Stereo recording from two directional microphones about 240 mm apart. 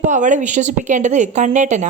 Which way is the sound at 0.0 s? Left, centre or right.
Right.